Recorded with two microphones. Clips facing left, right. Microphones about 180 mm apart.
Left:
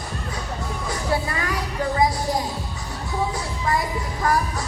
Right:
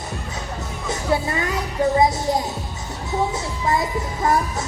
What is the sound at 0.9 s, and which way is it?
Music, 20° right (ahead or behind).